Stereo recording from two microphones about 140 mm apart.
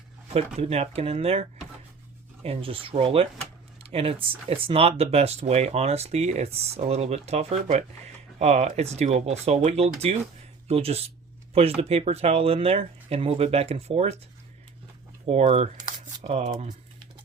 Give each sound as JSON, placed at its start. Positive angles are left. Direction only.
{"t": 0.3, "sound": "speech", "side_deg": -50}
{"t": 15.3, "sound": "speech", "side_deg": -45}